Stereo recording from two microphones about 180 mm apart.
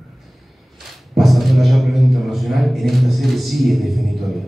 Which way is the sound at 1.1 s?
Centre (ahead or behind).